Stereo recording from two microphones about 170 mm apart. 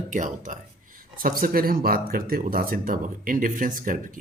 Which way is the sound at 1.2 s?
60° right (ahead or behind).